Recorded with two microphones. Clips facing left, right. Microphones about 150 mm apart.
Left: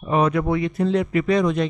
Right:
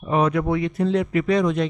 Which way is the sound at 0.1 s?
5° left (ahead or behind).